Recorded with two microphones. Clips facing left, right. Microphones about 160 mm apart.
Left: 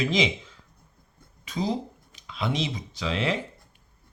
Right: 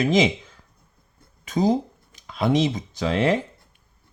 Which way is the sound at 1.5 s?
45° right (ahead or behind).